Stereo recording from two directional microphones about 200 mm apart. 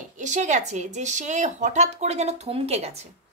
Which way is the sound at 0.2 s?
35° right (ahead or behind).